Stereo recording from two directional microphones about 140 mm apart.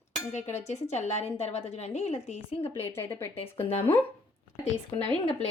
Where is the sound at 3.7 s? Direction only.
45° left (ahead or behind).